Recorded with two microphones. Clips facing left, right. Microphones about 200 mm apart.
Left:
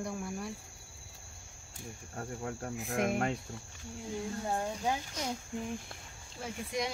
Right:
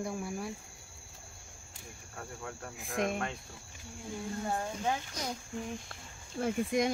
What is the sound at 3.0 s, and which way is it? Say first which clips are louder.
Speech: even; 5° left (ahead or behind).